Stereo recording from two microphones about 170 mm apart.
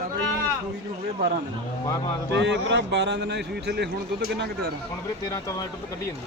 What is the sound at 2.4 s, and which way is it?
A man's voice, 90° right.